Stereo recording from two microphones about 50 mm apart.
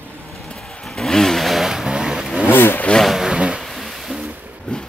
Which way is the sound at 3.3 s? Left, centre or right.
Centre.